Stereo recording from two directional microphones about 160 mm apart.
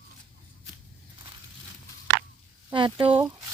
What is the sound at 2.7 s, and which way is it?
Speech, 30° right (ahead or behind).